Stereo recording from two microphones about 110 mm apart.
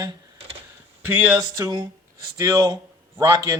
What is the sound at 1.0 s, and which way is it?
Speech, 20° right (ahead or behind).